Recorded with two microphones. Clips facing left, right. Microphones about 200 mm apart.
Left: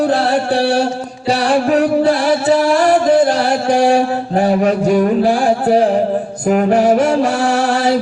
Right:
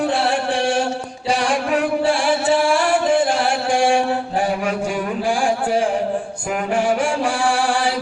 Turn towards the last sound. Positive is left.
turn(degrees=40)  # may be behind; listen again after turning